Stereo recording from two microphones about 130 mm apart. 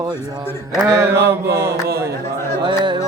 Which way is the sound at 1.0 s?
20° right (ahead or behind).